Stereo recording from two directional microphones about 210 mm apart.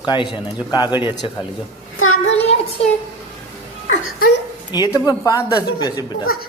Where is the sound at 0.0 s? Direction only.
20° left (ahead or behind).